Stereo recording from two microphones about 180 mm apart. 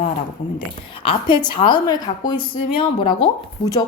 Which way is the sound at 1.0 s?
30° left (ahead or behind).